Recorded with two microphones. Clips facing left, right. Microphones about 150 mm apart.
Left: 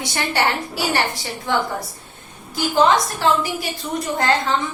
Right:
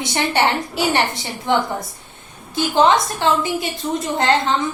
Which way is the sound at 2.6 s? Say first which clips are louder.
Right 1 dB; 20° right (ahead or behind).